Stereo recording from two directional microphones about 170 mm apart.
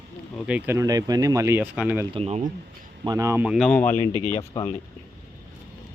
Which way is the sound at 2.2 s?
40° right (ahead or behind).